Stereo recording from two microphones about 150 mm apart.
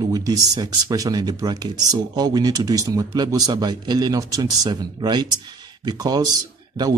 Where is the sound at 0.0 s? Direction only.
25° right (ahead or behind).